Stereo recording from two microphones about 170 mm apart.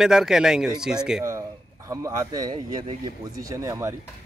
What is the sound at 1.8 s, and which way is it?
Speech, 20° right (ahead or behind).